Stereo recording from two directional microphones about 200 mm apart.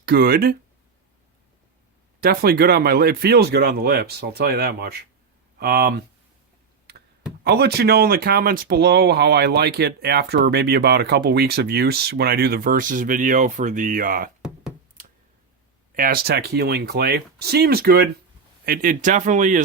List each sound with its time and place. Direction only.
0.0 s speech: 50° right (ahead or behind)
2.2 s speech: 50° right (ahead or behind)
7.4 s speech: 55° right (ahead or behind)
16.0 s speech: 45° right (ahead or behind)